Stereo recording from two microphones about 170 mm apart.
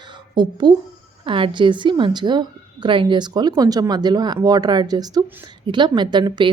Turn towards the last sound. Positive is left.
turn(degrees=-25)  # may be behind; listen again after turning